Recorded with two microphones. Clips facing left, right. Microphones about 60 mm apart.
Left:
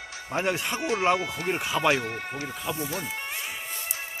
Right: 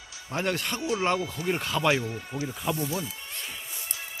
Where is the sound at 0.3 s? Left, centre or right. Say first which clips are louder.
Left 2 dB; centre.